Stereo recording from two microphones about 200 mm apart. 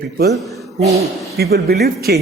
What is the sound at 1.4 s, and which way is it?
Speech, 50° right (ahead or behind).